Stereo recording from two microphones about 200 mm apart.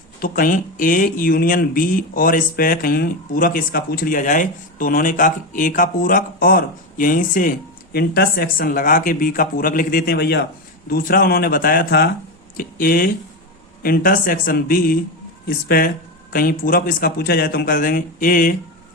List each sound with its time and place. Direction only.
0.2 s speech: 45° left (ahead or behind)